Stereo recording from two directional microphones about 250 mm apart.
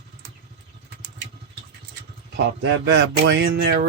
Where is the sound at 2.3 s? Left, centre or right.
Right.